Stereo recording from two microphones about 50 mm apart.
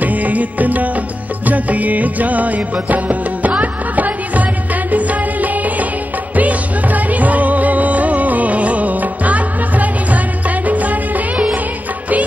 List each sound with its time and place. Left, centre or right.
0.0 s music: right